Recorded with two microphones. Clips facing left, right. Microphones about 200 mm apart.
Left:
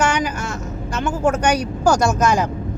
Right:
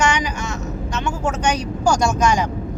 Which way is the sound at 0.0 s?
55° left (ahead or behind).